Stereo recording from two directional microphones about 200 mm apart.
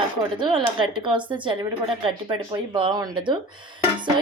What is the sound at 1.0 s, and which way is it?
Speech, 25° right (ahead or behind).